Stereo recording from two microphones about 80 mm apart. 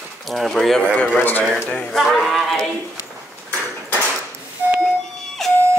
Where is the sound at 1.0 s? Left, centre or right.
Left.